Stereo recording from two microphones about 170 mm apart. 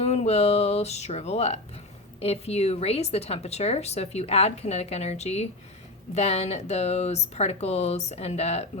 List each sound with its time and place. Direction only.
0.0 s a woman's voice: 40° left (ahead or behind)